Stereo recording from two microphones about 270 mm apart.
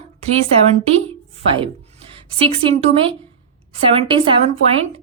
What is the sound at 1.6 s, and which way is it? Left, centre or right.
A woman's voice, right.